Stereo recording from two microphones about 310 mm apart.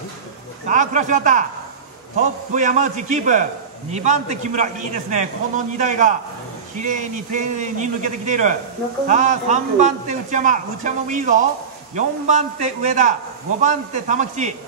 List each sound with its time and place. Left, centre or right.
0.7 s a man's voice: right
2.5 s a man's voice: right